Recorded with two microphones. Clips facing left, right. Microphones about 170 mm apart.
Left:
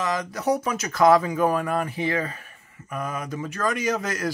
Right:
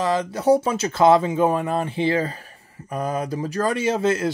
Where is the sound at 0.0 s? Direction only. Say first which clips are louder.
Right 5 dB; 30° right (ahead or behind).